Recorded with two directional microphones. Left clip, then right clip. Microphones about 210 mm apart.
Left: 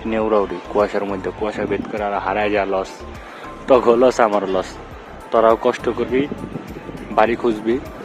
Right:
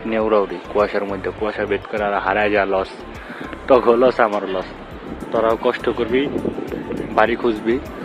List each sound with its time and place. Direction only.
0.1 s speech: 15° left (ahead or behind)
5.3 s speech: 30° left (ahead or behind)
5.6 s speech: 15° left (ahead or behind)